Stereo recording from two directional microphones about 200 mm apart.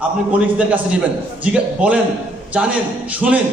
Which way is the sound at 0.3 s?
5° right (ahead or behind).